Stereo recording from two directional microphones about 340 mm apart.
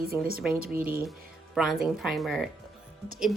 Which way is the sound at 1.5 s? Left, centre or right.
Centre.